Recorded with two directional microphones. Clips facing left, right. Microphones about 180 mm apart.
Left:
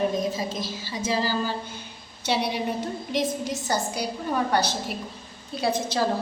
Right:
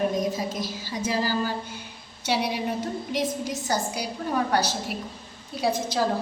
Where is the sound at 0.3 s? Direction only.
10° right (ahead or behind).